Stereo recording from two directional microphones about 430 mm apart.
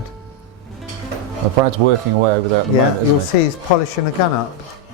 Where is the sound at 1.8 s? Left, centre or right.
Right.